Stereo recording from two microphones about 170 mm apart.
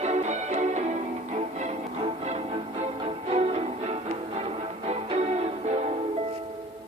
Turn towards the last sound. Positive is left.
turn(degrees=-35)  # may be behind; listen again after turning